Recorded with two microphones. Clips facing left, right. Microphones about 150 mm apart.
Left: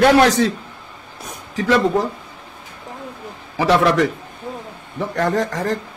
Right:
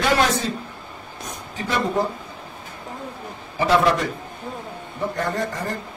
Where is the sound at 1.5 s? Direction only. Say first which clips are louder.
Left 8 dB; 90° left.